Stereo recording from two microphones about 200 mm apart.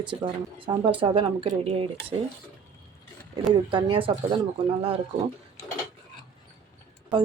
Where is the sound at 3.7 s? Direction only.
25° right (ahead or behind).